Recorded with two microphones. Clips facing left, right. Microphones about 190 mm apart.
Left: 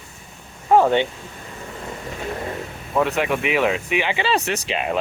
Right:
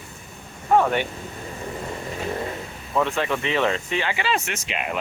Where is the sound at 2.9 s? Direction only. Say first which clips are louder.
Left 3 dB; 10° left (ahead or behind).